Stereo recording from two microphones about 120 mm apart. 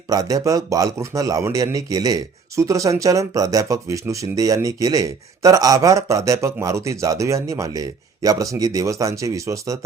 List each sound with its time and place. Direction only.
0.1 s speech: 30° right (ahead or behind)